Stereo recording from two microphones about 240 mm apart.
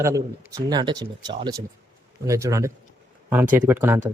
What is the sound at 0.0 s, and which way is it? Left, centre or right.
Speech, centre.